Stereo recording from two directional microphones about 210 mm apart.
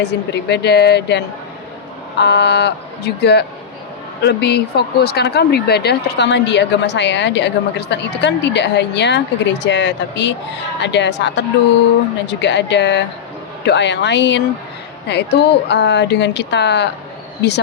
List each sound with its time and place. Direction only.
0.0 s speech: 55° left (ahead or behind)